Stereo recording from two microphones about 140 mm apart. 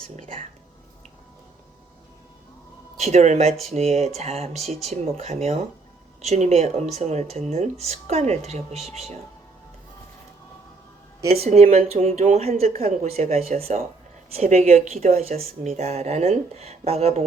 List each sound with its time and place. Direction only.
3.0 s speech: 50° right (ahead or behind)
11.3 s speech: 50° right (ahead or behind)